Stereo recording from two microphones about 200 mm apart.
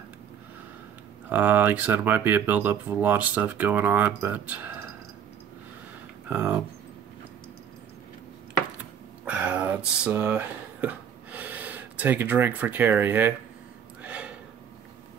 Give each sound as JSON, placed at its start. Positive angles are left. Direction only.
{"t": 1.3, "sound": "speech", "side_deg": -10}
{"t": 6.2, "sound": "speech", "side_deg": -10}
{"t": 9.2, "sound": "a sound", "side_deg": -5}
{"t": 14.0, "sound": "gasp", "side_deg": -5}